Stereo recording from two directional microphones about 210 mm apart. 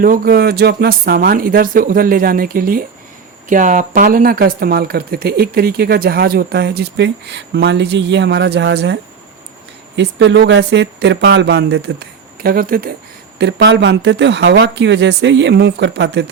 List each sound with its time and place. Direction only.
0.0 s speech: 45° right (ahead or behind)
13.4 s speech: 55° right (ahead or behind)